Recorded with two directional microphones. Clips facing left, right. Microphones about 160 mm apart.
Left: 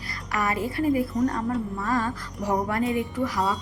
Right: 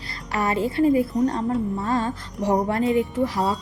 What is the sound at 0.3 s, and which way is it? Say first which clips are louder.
A woman's voice: right 4 dB; 25° right (ahead or behind).